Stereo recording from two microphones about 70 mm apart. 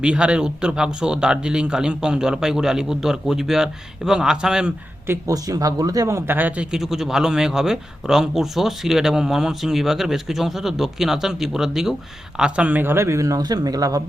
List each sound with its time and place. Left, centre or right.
0.0 s speech: centre
5.3 s speech: right
6.1 s speech: right
6.3 s speech: right
6.7 s a man's voice: centre
12.4 s speech: centre; by 13.2 s right
13.2 s speech: right